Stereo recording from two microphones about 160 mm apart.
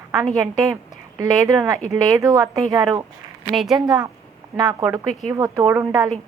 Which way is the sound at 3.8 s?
25° right (ahead or behind).